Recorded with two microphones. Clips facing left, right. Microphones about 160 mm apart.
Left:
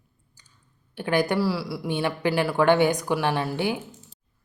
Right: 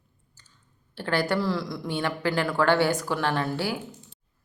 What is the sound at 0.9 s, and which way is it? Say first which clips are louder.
A woman's voice: left 3 dB; 15° left (ahead or behind).